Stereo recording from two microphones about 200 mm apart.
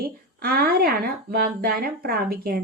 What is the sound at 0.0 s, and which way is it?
Speech, 50° right (ahead or behind).